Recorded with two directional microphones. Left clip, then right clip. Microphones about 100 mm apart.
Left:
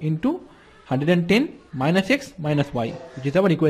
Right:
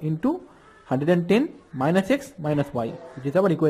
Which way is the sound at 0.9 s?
5° right (ahead or behind).